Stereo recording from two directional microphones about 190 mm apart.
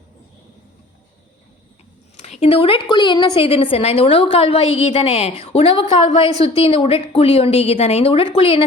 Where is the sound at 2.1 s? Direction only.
35° left (ahead or behind).